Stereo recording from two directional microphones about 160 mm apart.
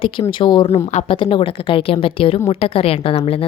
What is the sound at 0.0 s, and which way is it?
Speech, 35° left (ahead or behind).